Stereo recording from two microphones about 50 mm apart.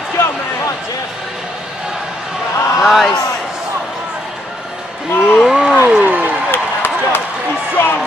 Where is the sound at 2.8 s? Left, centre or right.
Centre.